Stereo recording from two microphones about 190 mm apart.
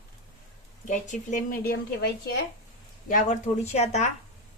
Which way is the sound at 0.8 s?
40° left (ahead or behind).